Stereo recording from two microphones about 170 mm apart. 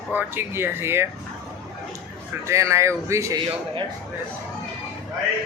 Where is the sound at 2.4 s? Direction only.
15° right (ahead or behind).